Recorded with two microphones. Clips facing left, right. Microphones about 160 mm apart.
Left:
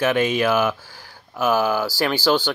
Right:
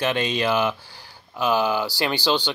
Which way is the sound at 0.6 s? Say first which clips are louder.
Left 2 dB; 15° right (ahead or behind).